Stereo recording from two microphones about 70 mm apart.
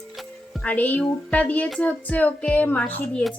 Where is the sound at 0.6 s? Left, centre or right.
Left.